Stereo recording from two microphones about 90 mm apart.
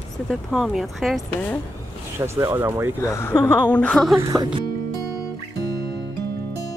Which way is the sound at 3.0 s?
30° left (ahead or behind).